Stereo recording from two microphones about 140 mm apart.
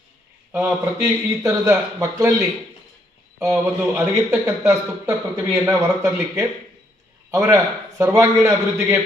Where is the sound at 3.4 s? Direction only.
20° right (ahead or behind).